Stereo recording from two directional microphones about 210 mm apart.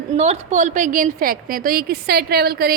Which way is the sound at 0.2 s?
35° right (ahead or behind).